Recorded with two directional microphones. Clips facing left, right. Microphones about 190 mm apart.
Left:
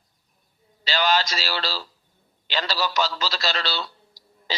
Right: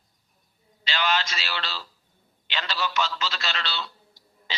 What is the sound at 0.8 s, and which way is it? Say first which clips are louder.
A man's voice: left 4 dB; 35° left (ahead or behind).